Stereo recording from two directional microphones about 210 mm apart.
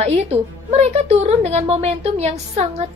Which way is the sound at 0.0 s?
30° right (ahead or behind).